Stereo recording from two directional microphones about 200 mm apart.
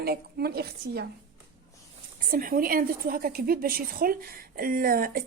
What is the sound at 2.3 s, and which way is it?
A woman's voice, 45° right (ahead or behind).